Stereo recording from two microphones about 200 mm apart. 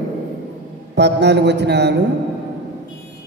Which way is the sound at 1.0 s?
60° right (ahead or behind).